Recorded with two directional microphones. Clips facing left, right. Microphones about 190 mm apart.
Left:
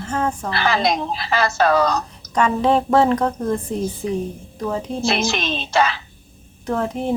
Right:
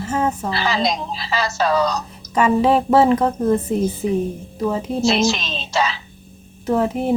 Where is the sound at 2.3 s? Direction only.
5° right (ahead or behind).